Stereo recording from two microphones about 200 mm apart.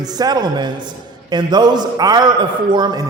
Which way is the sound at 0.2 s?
20° right (ahead or behind).